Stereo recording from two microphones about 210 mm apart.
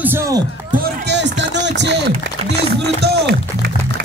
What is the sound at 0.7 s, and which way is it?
Run, 50° right (ahead or behind).